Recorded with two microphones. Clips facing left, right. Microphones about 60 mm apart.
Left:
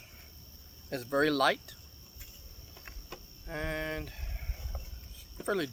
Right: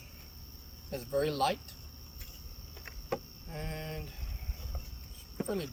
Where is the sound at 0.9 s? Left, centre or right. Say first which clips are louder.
Left 4 dB; left.